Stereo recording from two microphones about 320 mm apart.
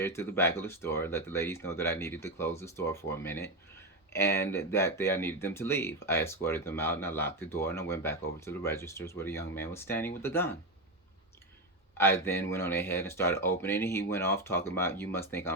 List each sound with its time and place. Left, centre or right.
0.0 s speech: centre
11.9 s speech: centre